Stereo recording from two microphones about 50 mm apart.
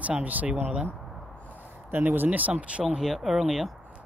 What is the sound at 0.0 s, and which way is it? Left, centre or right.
Speech, right.